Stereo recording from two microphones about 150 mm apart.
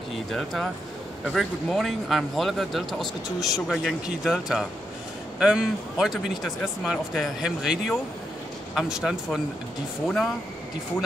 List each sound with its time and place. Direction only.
0.3 s speech: centre (ahead or behind)